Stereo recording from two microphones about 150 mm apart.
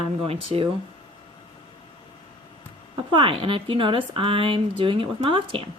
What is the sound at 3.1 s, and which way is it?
Speech, 35° right (ahead or behind).